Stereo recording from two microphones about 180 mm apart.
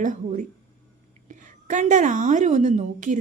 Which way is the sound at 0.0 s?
45° right (ahead or behind).